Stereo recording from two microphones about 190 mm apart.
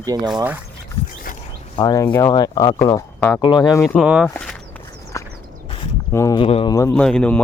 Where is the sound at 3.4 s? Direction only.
25° left (ahead or behind).